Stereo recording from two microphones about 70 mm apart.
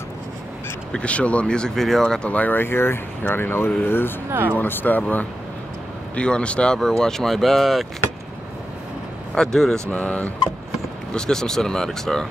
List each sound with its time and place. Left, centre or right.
0.9 s speech: centre
4.3 s speech: right
4.6 s speech: left; by 7.8 s centre
9.3 s speech: centre
9.8 s speech: left
11.1 s speech: centre